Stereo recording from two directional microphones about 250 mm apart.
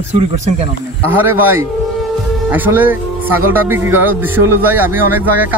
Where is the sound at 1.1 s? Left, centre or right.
Centre.